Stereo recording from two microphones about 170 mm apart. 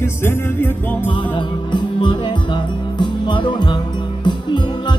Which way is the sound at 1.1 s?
30° left (ahead or behind).